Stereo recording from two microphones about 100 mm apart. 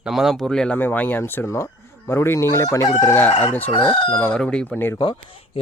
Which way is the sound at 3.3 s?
90° left.